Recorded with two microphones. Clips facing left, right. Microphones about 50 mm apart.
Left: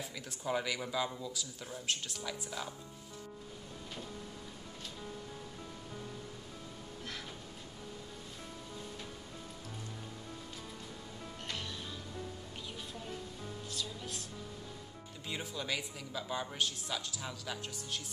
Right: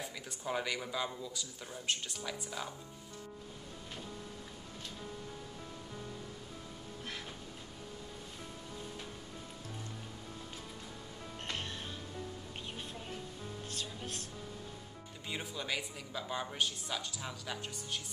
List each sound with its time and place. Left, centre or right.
0.0 s speech: centre
11.4 s music: right
13.7 s music: right
15.2 s speech: centre